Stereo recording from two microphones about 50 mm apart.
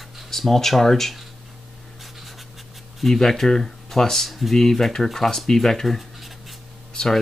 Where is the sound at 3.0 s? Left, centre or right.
Centre.